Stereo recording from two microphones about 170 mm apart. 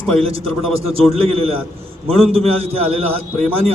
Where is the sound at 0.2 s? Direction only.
35° right (ahead or behind).